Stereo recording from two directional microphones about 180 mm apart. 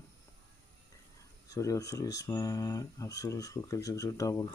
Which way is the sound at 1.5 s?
20° left (ahead or behind).